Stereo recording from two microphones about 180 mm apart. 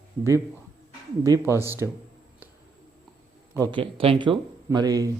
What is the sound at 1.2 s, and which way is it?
Speech, 15° right (ahead or behind).